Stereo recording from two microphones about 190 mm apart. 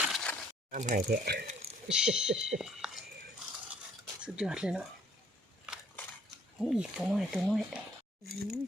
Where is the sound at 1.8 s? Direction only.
5° right (ahead or behind).